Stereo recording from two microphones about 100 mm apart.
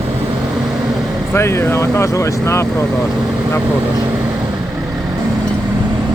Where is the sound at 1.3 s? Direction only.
25° left (ahead or behind).